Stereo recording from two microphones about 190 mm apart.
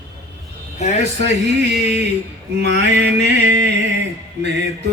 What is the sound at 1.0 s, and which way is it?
Mantra, 65° right (ahead or behind).